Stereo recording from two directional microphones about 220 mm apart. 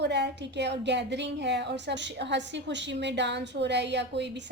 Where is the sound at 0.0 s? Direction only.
50° right (ahead or behind).